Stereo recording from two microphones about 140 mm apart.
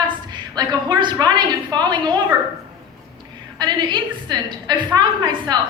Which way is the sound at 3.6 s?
30° right (ahead or behind).